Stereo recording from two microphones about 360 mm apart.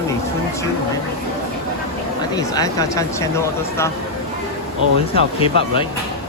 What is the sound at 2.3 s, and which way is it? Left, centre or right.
Speech, centre.